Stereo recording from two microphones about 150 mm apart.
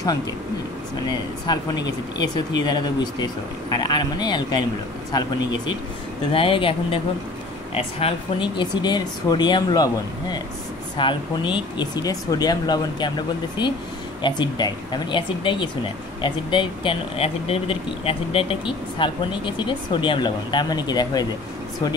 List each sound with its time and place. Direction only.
1.0 s speech: 30° left (ahead or behind)
14.2 s speech: 30° left (ahead or behind)